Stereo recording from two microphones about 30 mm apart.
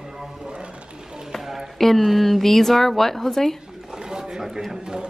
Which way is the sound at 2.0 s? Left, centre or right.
Centre.